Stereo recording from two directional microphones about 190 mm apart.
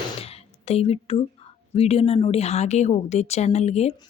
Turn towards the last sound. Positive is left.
turn(degrees=35)  # may be behind; listen again after turning